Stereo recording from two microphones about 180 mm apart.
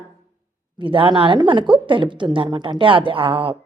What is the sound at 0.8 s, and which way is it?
A woman's voice, 30° right (ahead or behind).